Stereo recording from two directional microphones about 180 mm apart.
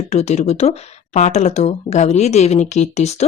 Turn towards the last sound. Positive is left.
turn(degrees=40)  # may be behind; listen again after turning